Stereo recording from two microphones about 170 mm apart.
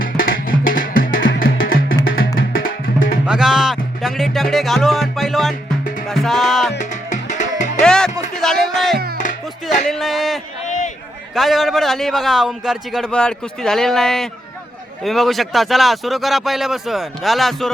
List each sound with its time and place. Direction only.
0.0 s music: 55° left (ahead or behind)
3.2 s music: 5° right (ahead or behind)
6.7 s music: 45° left (ahead or behind)
7.8 s music: 5° left (ahead or behind)
9.9 s a sound: centre (ahead or behind)
10.7 s a sound: 45° left (ahead or behind)
11.3 s a man's voice: centre (ahead or behind)